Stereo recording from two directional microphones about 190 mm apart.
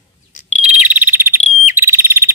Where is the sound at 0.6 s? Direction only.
10° right (ahead or behind).